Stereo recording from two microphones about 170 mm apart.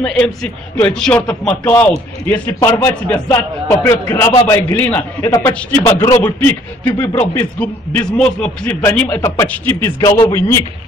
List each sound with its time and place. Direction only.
0.0 s a man's voice: 5° left (ahead or behind)
9.9 s a man's voice: 30° left (ahead or behind)
10.2 s a man's voice: 15° left (ahead or behind)